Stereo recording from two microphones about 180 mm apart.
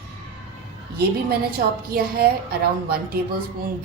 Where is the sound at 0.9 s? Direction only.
60° right (ahead or behind).